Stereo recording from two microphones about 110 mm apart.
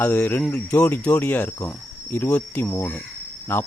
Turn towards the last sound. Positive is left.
turn(degrees=20)  # may be behind; listen again after turning